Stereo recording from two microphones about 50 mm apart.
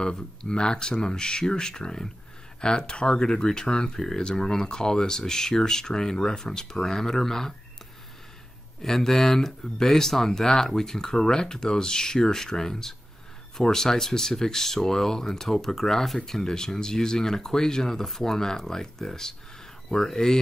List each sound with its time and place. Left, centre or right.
0.0 s speech: centre
8.8 s speech: centre